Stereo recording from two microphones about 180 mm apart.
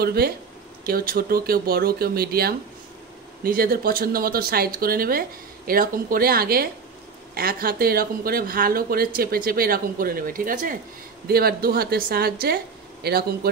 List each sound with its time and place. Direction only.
0.0 s speech: 60° right (ahead or behind)